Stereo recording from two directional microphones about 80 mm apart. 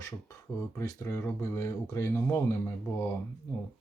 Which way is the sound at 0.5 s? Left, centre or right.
Left.